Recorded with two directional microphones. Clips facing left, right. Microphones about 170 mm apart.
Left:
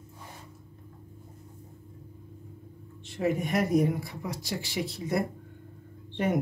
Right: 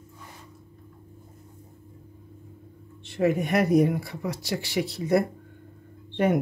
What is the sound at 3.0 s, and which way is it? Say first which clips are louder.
Speech: right 5 dB; 70° right (ahead or behind).